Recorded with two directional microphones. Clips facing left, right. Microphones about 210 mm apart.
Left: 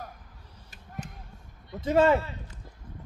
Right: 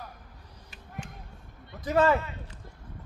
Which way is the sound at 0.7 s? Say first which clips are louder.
Left 1 dB; 40° left (ahead or behind).